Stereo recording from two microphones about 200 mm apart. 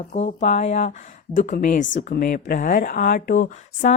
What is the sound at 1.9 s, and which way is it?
Speech, 45° left (ahead or behind).